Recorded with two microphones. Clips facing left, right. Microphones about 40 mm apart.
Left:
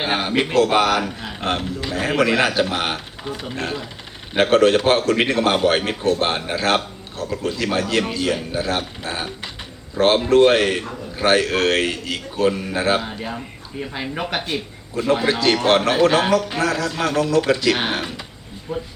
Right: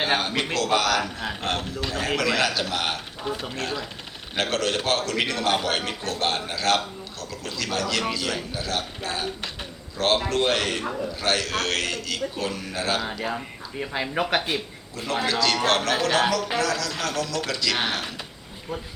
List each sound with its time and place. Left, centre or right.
0.0 s a man's voice: centre
13.2 s speech: centre
14.9 s a man's voice: left
18.7 s speech: centre